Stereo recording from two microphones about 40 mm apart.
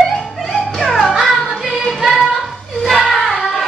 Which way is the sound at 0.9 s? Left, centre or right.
Centre.